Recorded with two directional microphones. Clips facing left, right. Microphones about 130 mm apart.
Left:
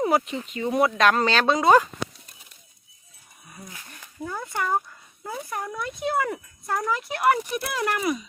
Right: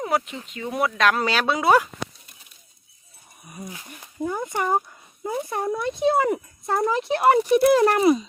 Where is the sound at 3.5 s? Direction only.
15° right (ahead or behind).